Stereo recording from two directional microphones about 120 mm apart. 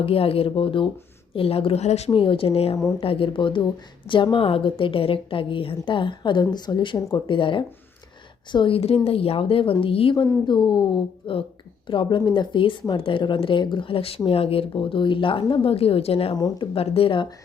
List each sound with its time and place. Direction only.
0.0 s speech: 50° left (ahead or behind)
2.0 s speech: 45° left (ahead or behind)
10.4 s a woman's voice: 40° left (ahead or behind); by 16.3 s 55° left (ahead or behind)
16.3 s a woman's voice: 35° left (ahead or behind)
16.7 s speech: 55° left (ahead or behind)